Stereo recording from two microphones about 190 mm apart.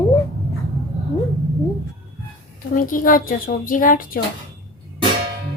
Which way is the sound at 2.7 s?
45° left (ahead or behind).